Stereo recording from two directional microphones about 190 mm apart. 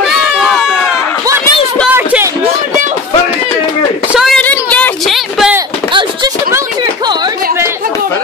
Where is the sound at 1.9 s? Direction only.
10° right (ahead or behind).